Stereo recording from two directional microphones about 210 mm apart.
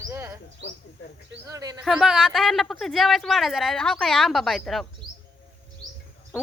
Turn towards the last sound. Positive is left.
turn(degrees=0)  # may be behind; listen again after turning